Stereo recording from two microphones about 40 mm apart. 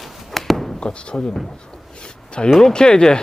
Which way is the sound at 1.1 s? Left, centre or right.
Centre.